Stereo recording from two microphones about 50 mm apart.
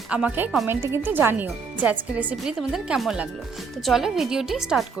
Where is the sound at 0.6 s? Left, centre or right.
Right.